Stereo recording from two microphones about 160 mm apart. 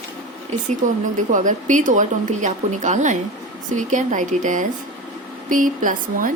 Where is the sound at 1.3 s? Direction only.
50° right (ahead or behind).